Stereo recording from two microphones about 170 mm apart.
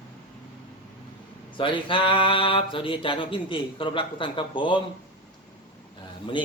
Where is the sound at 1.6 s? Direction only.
30° left (ahead or behind).